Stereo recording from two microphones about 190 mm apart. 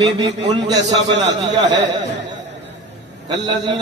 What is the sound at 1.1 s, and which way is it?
Speech, 70° right (ahead or behind).